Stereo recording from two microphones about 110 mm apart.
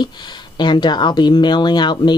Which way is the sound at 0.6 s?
45° left (ahead or behind).